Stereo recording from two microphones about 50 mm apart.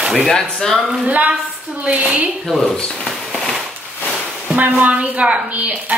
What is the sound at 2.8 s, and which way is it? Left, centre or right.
Speech, centre.